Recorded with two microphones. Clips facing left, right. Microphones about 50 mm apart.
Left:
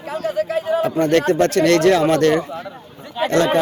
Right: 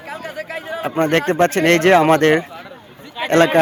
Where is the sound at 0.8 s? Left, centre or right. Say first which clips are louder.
Right 2 dB; right.